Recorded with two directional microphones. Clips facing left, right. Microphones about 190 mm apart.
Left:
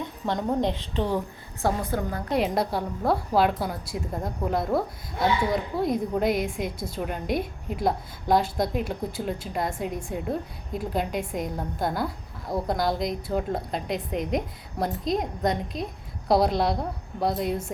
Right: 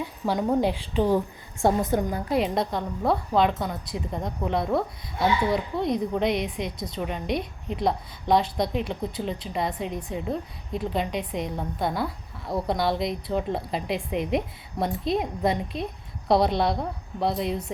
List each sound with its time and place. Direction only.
0.0 s a woman's voice: 5° right (ahead or behind)
2.3 s a woman's voice: 5° left (ahead or behind)